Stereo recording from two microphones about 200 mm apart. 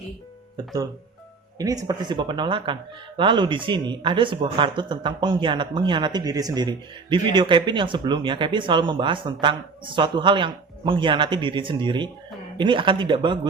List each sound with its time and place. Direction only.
1.5 s speech: 20° right (ahead or behind)